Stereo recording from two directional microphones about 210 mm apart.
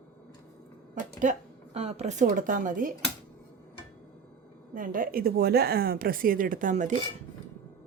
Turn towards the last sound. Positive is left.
turn(degrees=-40)  # may be behind; listen again after turning